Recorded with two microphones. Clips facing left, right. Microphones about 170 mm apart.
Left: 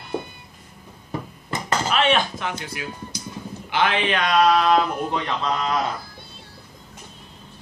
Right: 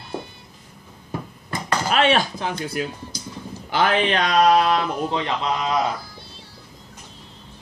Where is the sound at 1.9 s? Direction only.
40° right (ahead or behind).